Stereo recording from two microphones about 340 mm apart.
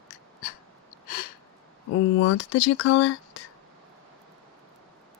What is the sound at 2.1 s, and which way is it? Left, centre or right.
Speech, left.